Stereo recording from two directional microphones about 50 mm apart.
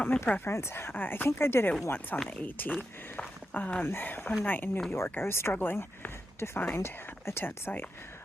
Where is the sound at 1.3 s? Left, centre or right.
Left.